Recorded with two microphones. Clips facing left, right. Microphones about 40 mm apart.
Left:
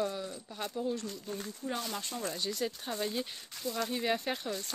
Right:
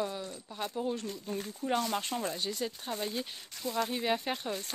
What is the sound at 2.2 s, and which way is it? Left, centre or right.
Speech, centre.